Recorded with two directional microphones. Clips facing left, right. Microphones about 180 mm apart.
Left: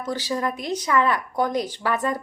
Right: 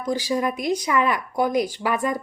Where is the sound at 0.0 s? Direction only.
10° right (ahead or behind).